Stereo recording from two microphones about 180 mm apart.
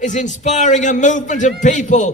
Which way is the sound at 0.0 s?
45° left (ahead or behind).